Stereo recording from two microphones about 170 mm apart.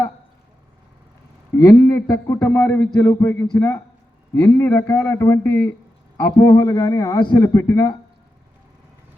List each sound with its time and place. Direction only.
1.5 s a man's voice: 20° left (ahead or behind)